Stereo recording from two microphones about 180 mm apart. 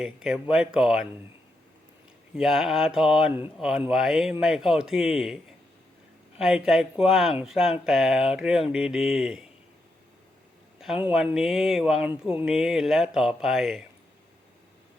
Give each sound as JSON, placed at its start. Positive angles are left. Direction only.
{"t": 0.0, "sound": "speech", "side_deg": -5}
{"t": 2.3, "sound": "speech", "side_deg": 0}
{"t": 6.4, "sound": "speech", "side_deg": 0}
{"t": 10.8, "sound": "a man's voice", "side_deg": -5}